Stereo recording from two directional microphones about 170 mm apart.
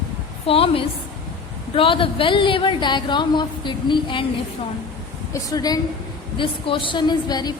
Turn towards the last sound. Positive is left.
turn(degrees=25)  # may be behind; listen again after turning